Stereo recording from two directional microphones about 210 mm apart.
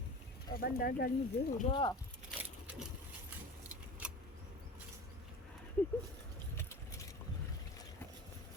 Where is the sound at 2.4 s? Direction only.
5° right (ahead or behind).